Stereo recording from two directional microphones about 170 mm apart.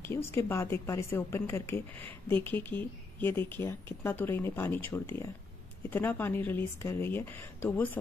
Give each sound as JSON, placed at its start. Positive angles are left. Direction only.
{"t": 0.0, "sound": "speech", "side_deg": 15}
{"t": 2.0, "sound": "speech", "side_deg": -30}
{"t": 2.4, "sound": "speech", "side_deg": 10}